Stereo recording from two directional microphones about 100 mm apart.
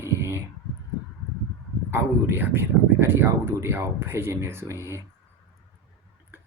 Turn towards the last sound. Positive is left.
turn(degrees=-30)  # may be behind; listen again after turning